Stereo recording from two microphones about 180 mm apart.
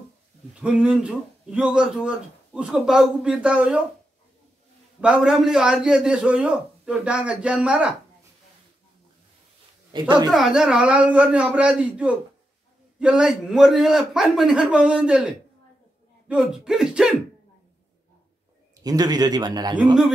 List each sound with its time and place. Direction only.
0.6 s a man's voice: 5° right (ahead or behind)
5.0 s a man's voice: 5° right (ahead or behind)
9.9 s a man's voice: 25° right (ahead or behind)
10.3 s a man's voice: 5° right (ahead or behind)
18.9 s a man's voice: 20° right (ahead or behind)